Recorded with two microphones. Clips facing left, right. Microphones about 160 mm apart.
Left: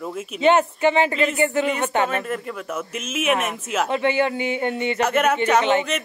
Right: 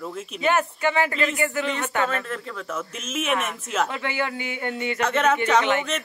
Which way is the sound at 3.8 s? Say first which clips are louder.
Left 9 dB; 20° left (ahead or behind).